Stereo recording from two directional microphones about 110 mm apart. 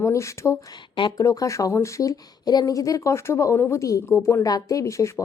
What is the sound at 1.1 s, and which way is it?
Speech, 30° left (ahead or behind).